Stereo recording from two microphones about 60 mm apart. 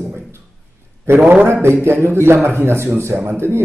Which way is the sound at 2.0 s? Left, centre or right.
Right.